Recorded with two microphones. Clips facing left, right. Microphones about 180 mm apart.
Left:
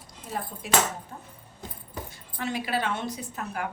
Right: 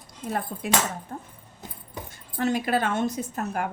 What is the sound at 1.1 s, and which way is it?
A woman's voice, 50° right (ahead or behind).